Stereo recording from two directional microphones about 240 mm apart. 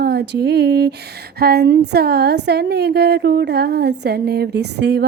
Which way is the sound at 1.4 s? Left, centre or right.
Right.